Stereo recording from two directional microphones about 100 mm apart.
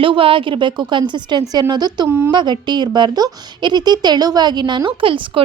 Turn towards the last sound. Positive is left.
turn(degrees=-60)  # may be behind; listen again after turning